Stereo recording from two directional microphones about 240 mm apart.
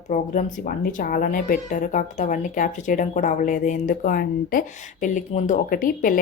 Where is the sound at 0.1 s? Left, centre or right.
Left.